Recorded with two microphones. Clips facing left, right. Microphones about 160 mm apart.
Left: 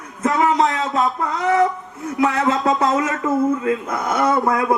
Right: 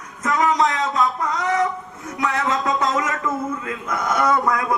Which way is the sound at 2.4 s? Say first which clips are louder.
Left 4 dB; 35° left (ahead or behind).